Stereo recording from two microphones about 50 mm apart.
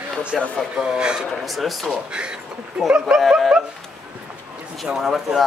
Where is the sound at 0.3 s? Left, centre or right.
Centre.